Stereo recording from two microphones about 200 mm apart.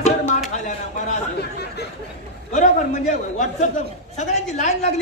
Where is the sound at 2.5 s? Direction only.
40° left (ahead or behind).